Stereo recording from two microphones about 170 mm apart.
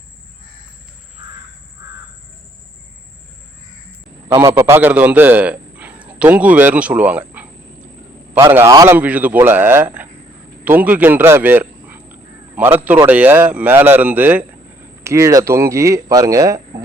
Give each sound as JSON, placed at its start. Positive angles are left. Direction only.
{"t": 4.3, "sound": "a man's voice", "side_deg": -15}